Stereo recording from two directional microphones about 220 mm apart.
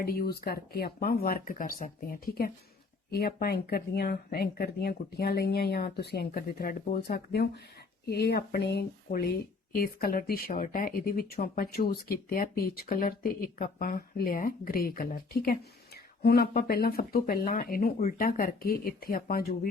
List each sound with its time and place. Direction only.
0.0 s speech: 45° left (ahead or behind)